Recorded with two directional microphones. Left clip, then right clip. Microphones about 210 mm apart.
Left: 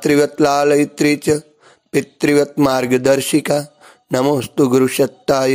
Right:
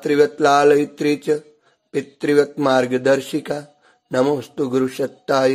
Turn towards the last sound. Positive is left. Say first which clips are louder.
# left 3 dB
turn(degrees=30)  # may be behind; listen again after turning